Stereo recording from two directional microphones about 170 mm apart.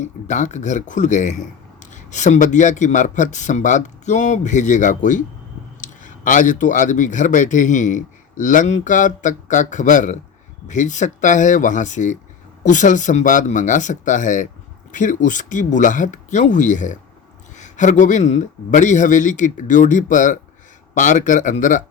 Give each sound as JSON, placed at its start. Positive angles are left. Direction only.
{"t": 0.0, "sound": "speech", "side_deg": 45}